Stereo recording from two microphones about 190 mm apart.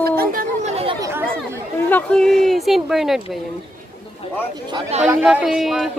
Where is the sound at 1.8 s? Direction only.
10° left (ahead or behind).